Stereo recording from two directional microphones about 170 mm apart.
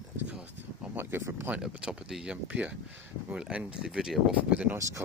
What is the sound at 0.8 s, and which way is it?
Speech, 10° right (ahead or behind).